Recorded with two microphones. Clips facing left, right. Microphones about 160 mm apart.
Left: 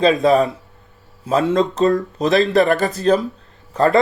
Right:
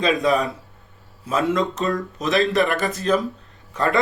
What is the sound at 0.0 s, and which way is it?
Speech, 35° left (ahead or behind).